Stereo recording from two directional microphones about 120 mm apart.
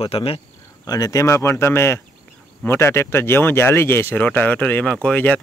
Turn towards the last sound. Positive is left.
turn(degrees=10)  # may be behind; listen again after turning